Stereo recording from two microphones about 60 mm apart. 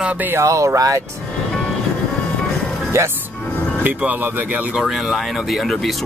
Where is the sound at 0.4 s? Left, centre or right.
Right.